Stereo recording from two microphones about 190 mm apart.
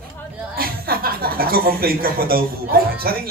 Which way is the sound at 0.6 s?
50° right (ahead or behind).